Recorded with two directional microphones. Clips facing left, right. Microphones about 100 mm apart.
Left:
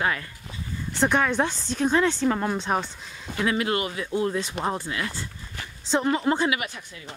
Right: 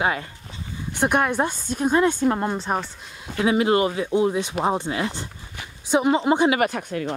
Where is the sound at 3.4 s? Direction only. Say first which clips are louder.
Right 6 dB; 25° right (ahead or behind).